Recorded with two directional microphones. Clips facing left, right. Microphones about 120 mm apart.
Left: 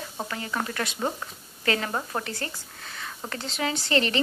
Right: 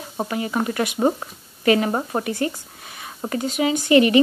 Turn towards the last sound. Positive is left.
turn(degrees=-15)  # may be behind; listen again after turning